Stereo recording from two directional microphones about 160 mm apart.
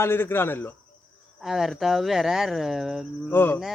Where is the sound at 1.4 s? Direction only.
Centre (ahead or behind).